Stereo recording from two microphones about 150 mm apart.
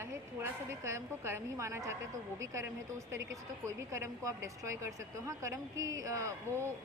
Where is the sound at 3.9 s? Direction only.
20° right (ahead or behind).